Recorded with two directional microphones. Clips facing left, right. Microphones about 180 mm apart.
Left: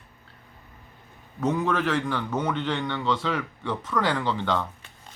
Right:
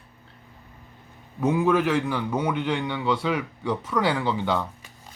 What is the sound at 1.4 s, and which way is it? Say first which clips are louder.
A man's voice: right 4 dB; 10° right (ahead or behind).